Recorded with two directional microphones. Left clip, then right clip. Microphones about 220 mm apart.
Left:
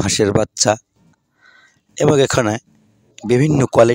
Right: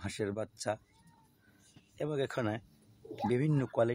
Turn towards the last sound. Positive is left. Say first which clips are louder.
# left 19 dB
turn(degrees=45)  # may be behind; listen again after turning